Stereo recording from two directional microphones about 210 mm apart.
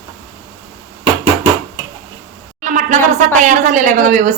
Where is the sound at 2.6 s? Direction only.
40° right (ahead or behind).